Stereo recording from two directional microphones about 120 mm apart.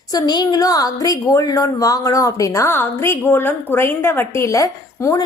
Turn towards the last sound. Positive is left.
turn(degrees=30)  # may be behind; listen again after turning